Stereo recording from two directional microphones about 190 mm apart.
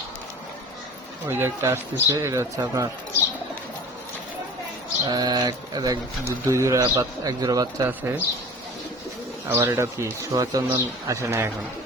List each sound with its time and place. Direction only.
1.3 s a man's voice: 15° right (ahead or behind)
5.0 s speech: 20° right (ahead or behind)
9.6 s a man's voice: 15° right (ahead or behind)